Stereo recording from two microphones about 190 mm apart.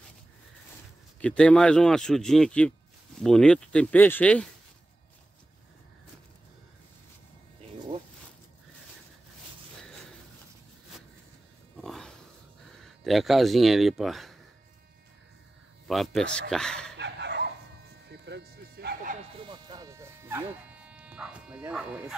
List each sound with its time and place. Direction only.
1.2 s speech: 5° left (ahead or behind)
11.7 s a sound: centre (ahead or behind)
12.8 s speech: centre (ahead or behind)
15.9 s speech: centre (ahead or behind)
16.9 s dog: 65° right (ahead or behind)
18.1 s a sound: 60° right (ahead or behind)
19.4 s sheep: 25° right (ahead or behind); by 22.0 s 5° right (ahead or behind)